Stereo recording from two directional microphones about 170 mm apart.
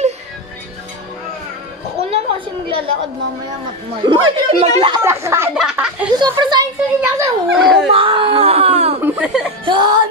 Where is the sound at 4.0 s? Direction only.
30° right (ahead or behind).